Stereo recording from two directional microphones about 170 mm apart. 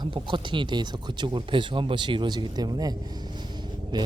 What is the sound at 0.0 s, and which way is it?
Speech, 30° right (ahead or behind).